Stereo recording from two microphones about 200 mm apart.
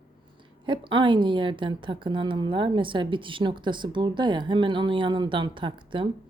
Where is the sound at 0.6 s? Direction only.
25° right (ahead or behind).